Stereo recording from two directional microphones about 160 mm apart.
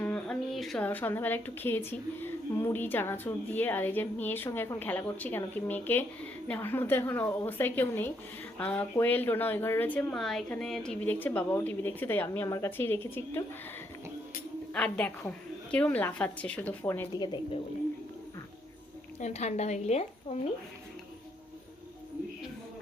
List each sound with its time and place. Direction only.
0.0 s a woman's voice: 5° left (ahead or behind)
14.7 s a woman's voice: 5° left (ahead or behind)
17.1 s speech: 25° left (ahead or behind)
19.2 s a woman's voice: 45° left (ahead or behind)